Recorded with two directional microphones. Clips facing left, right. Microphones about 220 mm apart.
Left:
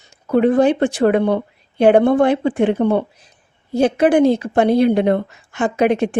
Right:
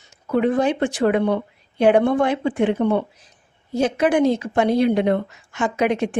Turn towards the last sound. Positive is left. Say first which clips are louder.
# left 4 dB
turn(degrees=35)  # may be behind; listen again after turning